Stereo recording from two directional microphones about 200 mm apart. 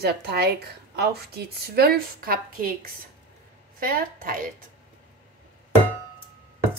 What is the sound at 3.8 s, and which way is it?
Speech, 45° right (ahead or behind).